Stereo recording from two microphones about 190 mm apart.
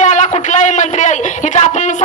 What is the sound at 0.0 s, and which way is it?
A man's voice, 40° left (ahead or behind).